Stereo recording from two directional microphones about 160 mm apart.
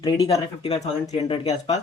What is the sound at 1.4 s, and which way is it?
Speech, 40° left (ahead or behind).